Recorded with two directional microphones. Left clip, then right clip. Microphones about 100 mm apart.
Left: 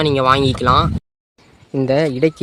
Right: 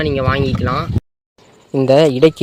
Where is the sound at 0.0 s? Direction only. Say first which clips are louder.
Left 3 dB; 35° left (ahead or behind).